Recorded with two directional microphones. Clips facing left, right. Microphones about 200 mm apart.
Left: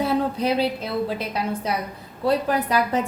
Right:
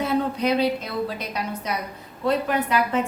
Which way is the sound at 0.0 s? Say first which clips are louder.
Left 1 dB; 30° left (ahead or behind).